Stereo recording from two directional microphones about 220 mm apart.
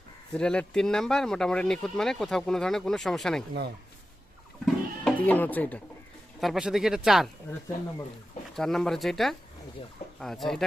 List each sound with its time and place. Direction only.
0.3 s speech: 5° left (ahead or behind)
4.6 s goat: 5° left (ahead or behind)
6.4 s speech: centre (ahead or behind)
8.5 s speech: centre (ahead or behind)